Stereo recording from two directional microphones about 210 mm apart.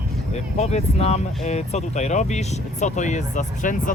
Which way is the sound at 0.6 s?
30° left (ahead or behind).